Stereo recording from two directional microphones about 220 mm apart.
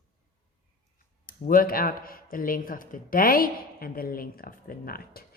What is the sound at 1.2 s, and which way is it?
Speech, 40° left (ahead or behind).